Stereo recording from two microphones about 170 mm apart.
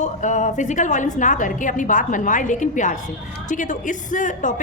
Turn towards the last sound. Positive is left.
turn(degrees=50)  # may be behind; listen again after turning